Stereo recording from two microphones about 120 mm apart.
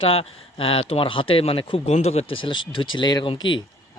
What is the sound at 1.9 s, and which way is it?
Speech, 60° left (ahead or behind).